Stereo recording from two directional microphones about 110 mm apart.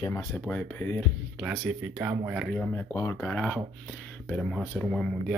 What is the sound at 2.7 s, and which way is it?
Speech, 20° left (ahead or behind).